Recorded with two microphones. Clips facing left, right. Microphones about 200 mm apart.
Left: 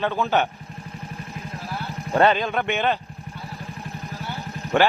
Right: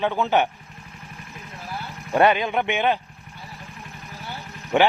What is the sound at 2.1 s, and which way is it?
Speech, 15° right (ahead or behind).